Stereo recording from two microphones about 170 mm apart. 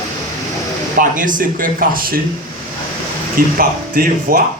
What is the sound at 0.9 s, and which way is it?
Speech, 50° right (ahead or behind).